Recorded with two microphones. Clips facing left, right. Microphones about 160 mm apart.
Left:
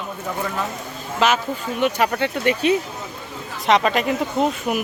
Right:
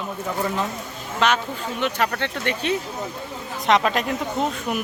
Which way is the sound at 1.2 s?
5° left (ahead or behind).